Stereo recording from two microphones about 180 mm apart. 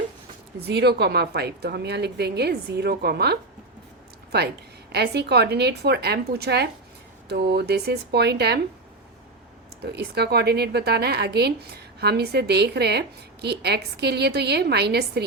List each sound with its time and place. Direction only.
0.7 s speech: 65° right (ahead or behind)
4.9 s a woman's voice: 65° right (ahead or behind)
9.8 s speech: 65° right (ahead or behind)